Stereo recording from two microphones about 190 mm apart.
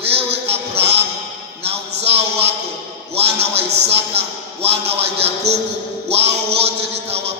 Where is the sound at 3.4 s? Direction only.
60° right (ahead or behind).